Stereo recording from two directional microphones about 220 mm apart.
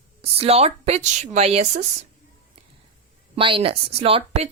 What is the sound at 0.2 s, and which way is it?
Speech, 25° right (ahead or behind).